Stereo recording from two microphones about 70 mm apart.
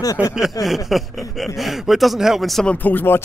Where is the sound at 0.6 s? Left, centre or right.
Centre.